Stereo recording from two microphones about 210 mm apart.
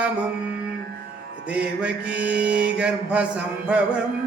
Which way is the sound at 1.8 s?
5° right (ahead or behind).